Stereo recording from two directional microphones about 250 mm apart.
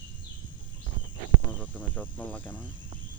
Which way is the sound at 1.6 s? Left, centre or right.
Centre.